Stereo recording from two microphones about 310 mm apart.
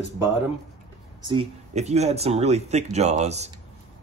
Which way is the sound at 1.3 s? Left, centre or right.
Centre.